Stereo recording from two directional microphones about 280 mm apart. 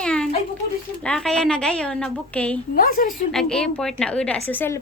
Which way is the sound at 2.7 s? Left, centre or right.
Left.